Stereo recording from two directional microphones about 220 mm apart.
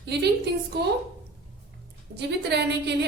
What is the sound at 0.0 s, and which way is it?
Speech, 50° right (ahead or behind).